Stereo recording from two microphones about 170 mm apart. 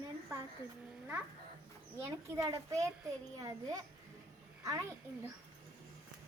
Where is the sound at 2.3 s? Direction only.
20° right (ahead or behind).